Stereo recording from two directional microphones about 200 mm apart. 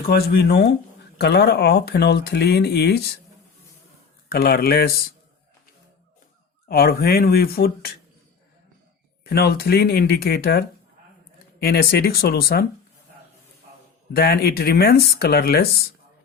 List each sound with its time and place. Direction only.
0.1 s speech: 55° left (ahead or behind)
4.3 s speech: 50° left (ahead or behind)
6.7 s speech: 50° left (ahead or behind)
9.2 s speech: 50° left (ahead or behind)
14.1 s speech: 50° left (ahead or behind)